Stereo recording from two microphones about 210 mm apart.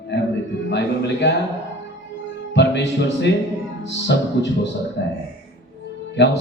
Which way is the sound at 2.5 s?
55° left (ahead or behind).